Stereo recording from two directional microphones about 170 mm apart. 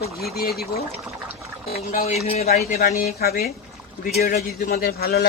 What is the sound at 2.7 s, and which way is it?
A man's voice, 60° left (ahead or behind).